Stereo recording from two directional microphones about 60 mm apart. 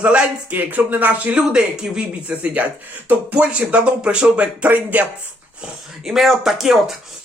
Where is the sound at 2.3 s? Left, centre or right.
Right.